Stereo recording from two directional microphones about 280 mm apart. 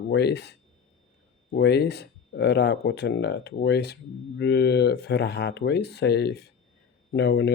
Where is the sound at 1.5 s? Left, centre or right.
Left.